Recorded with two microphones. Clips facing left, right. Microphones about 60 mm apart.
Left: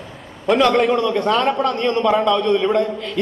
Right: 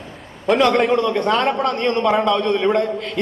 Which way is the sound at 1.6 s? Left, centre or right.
Right.